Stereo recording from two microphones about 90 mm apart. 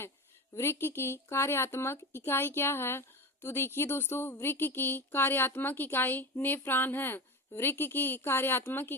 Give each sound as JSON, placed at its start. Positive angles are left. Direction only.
{"t": 0.5, "sound": "speech", "side_deg": 30}